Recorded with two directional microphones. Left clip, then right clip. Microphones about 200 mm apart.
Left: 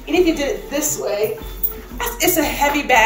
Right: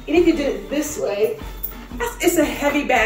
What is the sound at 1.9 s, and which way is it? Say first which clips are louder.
A woman's voice: even; 15° right (ahead or behind).